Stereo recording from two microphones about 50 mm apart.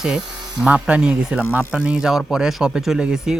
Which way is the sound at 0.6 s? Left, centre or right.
Right.